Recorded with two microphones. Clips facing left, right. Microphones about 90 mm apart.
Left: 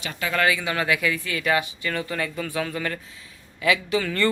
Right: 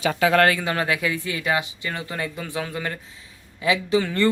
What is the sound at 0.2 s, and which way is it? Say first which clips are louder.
Speech: right 7 dB; 90° right.